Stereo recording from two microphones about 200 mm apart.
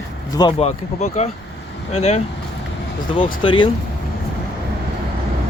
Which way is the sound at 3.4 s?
25° left (ahead or behind).